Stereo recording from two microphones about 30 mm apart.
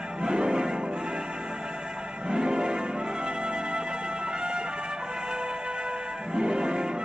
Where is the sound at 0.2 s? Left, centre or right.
Right.